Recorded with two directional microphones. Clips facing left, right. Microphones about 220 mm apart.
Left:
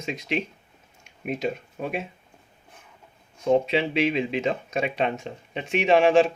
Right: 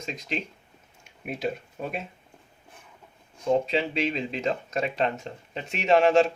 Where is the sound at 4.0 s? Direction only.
5° left (ahead or behind).